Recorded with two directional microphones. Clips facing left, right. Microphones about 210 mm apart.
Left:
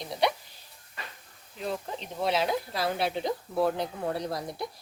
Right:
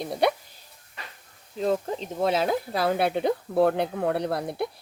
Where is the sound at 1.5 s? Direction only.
40° right (ahead or behind).